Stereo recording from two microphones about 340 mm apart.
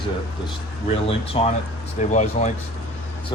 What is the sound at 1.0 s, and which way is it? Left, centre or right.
Speech, centre.